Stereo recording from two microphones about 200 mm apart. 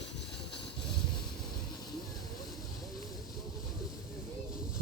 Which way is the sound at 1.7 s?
20° left (ahead or behind).